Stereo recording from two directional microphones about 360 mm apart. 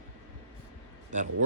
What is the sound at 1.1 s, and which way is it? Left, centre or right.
Speech, right.